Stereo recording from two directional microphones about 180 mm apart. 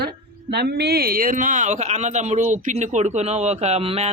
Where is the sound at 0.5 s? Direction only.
65° right (ahead or behind).